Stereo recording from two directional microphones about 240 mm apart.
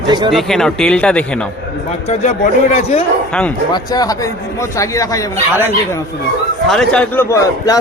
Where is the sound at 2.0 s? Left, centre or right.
Left.